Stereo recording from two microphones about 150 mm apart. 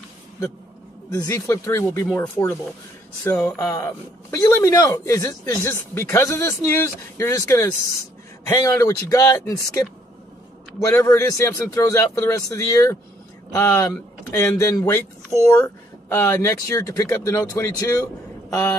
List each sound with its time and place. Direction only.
1.1 s a man's voice: 20° left (ahead or behind)
3.5 s a man's voice: 20° left (ahead or behind)